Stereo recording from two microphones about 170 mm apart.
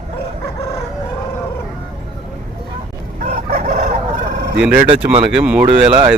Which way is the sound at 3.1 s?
55° right (ahead or behind).